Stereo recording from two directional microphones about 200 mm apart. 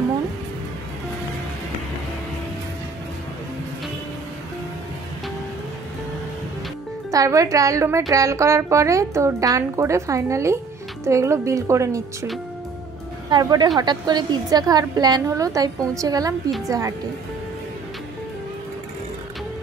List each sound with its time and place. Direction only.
7.1 s speech: 15° right (ahead or behind)
13.3 s a woman's voice: 20° right (ahead or behind)